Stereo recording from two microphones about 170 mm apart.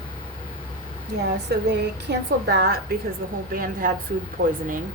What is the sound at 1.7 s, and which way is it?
Speech, 80° right.